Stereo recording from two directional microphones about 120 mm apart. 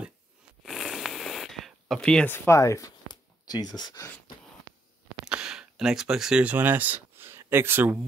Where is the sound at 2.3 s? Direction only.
20° left (ahead or behind).